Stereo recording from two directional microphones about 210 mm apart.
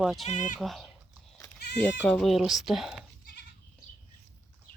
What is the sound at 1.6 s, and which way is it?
Goat, 50° left (ahead or behind).